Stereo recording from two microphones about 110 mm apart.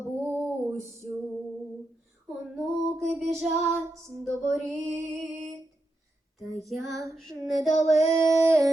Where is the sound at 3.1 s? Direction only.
Centre (ahead or behind).